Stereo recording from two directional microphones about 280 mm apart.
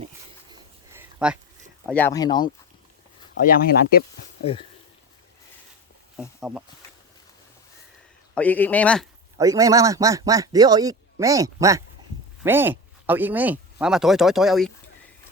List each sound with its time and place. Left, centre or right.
0.5 s a sound: centre
1.9 s speech: centre
3.4 s speech: left
6.1 s speech: centre
8.4 s speech: centre
9.4 s speech: centre